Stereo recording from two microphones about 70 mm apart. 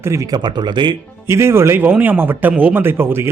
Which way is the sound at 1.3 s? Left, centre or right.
Right.